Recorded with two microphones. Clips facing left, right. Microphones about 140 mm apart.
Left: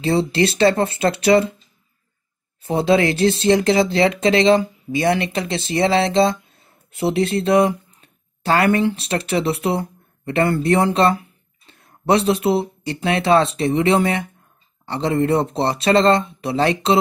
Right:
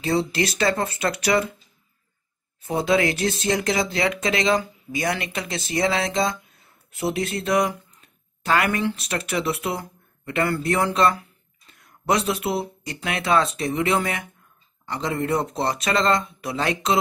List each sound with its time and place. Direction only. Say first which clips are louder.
0.0 s speech: left 5 dB; 25° left (ahead or behind)
2.6 s speech: left 4 dB; 30° left (ahead or behind)